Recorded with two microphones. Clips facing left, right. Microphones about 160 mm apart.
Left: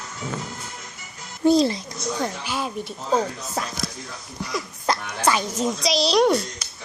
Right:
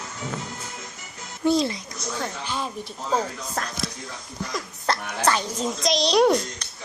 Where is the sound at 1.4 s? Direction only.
35° left (ahead or behind).